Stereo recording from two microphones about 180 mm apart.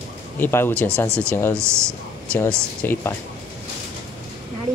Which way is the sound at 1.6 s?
15° right (ahead or behind).